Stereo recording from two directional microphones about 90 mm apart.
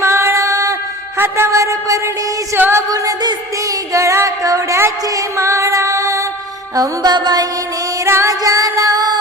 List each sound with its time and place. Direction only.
0.0 s music: 30° right (ahead or behind)
2.9 s music: 40° right (ahead or behind)
6.7 s music: 50° right (ahead or behind)
8.0 s music: 30° right (ahead or behind)